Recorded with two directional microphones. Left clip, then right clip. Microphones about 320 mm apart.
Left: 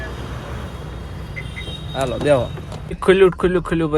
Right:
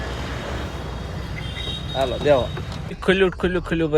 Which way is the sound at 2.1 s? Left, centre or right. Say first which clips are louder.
Left 2 dB; left.